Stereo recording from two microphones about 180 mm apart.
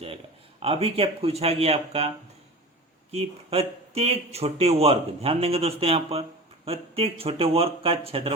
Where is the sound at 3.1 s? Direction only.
35° right (ahead or behind).